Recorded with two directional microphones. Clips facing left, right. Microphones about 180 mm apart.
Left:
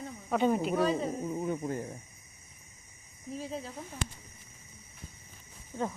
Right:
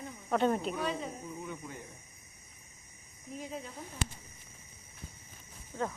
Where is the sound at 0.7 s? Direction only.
40° left (ahead or behind).